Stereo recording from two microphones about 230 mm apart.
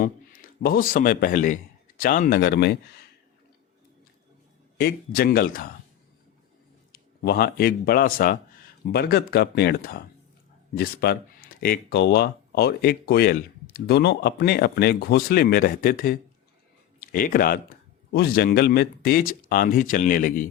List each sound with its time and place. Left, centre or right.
0.6 s a man's voice: left
4.8 s a man's voice: left
6.9 s a man's voice: left